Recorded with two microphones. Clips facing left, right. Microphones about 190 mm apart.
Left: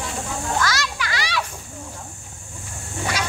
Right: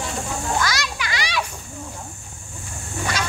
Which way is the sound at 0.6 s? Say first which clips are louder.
Left 1 dB; 15° right (ahead or behind).